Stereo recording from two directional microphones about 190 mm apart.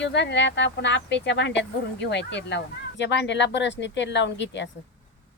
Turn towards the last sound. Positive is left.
turn(degrees=70)  # may be behind; listen again after turning